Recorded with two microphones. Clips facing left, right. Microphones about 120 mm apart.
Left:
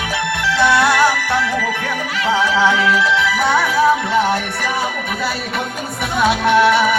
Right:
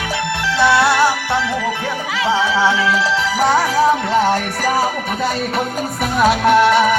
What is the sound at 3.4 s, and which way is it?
Music, 35° right (ahead or behind).